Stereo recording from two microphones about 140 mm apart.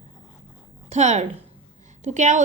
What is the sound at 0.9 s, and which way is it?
A woman's voice, 55° right (ahead or behind).